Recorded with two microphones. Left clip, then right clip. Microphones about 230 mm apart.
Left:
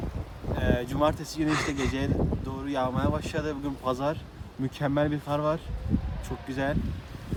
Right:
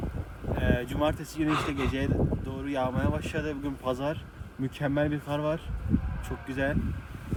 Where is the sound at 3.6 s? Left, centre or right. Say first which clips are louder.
Left 3 dB; centre.